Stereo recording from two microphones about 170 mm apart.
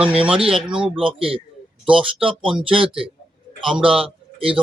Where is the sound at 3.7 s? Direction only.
5° right (ahead or behind).